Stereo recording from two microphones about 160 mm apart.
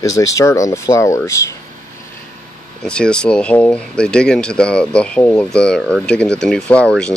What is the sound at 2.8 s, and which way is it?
Speech, 5° left (ahead or behind).